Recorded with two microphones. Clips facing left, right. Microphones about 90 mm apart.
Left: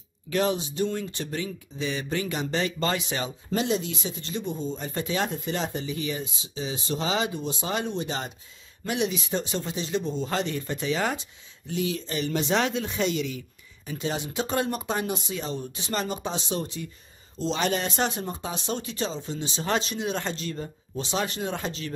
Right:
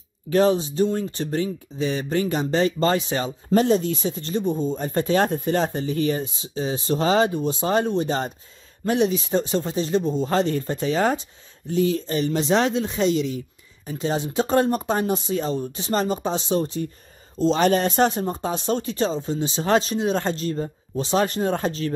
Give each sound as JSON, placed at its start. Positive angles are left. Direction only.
{"t": 0.3, "sound": "speech", "side_deg": -35}